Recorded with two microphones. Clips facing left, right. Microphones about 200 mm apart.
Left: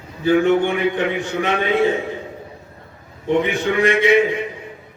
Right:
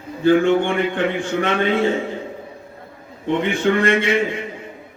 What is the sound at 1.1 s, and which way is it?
Speech, 55° right (ahead or behind).